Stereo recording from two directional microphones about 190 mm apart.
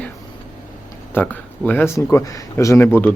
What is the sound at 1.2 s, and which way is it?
Speech, 10° left (ahead or behind).